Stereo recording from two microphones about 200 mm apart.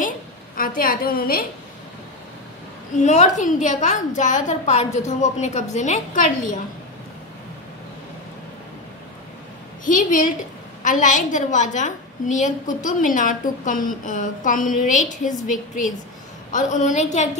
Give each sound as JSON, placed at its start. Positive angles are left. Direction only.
{"t": 0.6, "sound": "a woman's voice", "side_deg": 45}
{"t": 3.0, "sound": "a woman's voice", "side_deg": 35}
{"t": 9.8, "sound": "a woman's voice", "side_deg": 40}
{"t": 16.5, "sound": "a woman's voice", "side_deg": 40}